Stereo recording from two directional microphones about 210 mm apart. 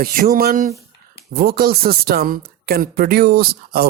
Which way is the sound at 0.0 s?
45° right (ahead or behind).